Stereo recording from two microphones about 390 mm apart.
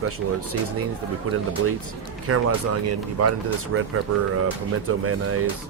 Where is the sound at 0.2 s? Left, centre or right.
Right.